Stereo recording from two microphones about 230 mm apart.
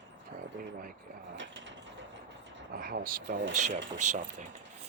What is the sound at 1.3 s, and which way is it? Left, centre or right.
Mechanisms, right.